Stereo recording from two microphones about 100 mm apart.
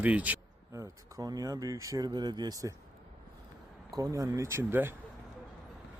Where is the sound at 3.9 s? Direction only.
35° right (ahead or behind).